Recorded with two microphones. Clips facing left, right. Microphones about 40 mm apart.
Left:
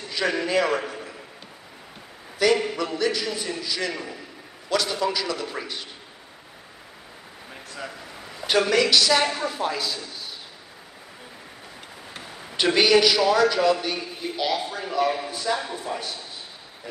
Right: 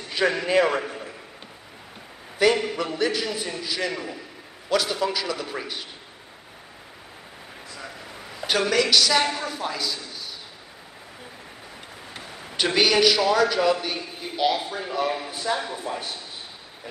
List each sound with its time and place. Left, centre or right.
0.1 s a sound: centre
0.5 s a man's voice: centre
2.3 s a man's voice: centre
3.9 s a woman's voice: centre
8.4 s a woman's voice: centre
12.1 s a man's voice: centre